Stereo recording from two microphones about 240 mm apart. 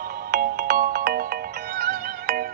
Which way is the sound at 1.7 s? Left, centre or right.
Right.